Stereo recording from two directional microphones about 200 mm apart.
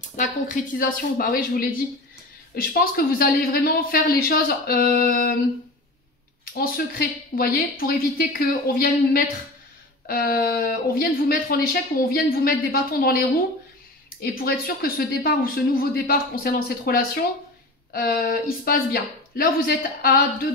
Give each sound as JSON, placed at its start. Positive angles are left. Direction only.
{"t": 0.1, "sound": "speech", "side_deg": 40}
{"t": 6.4, "sound": "speech", "side_deg": 45}